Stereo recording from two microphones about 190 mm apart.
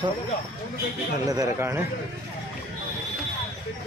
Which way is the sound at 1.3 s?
15° right (ahead or behind).